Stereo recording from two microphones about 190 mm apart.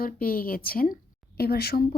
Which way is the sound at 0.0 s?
50° left (ahead or behind).